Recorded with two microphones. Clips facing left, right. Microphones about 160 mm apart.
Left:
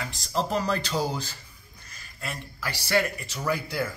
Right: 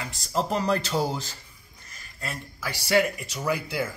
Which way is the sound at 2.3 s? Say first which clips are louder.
Even; 5° right (ahead or behind).